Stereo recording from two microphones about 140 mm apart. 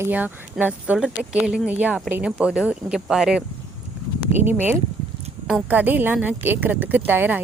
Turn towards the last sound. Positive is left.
turn(degrees=-15)  # may be behind; listen again after turning